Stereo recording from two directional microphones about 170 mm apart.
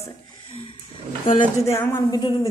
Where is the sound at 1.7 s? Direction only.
20° left (ahead or behind).